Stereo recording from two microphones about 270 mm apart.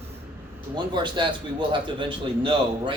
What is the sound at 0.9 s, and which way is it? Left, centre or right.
A man's voice, centre.